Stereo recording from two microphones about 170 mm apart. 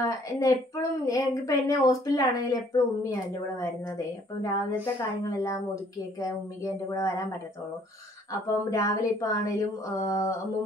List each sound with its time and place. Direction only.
0.0 s speech: 20° left (ahead or behind)
8.3 s speech: 20° left (ahead or behind)